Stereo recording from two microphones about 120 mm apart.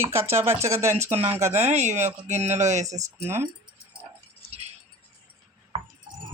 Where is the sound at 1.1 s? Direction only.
60° right (ahead or behind); by 2.9 s 75° right (ahead or behind).